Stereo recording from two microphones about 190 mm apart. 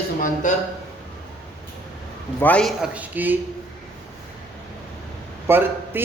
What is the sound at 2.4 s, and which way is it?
Speech, 5° left (ahead or behind).